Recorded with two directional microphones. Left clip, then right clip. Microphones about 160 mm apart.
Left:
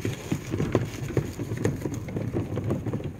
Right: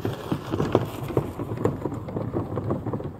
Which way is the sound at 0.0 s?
5° left (ahead or behind).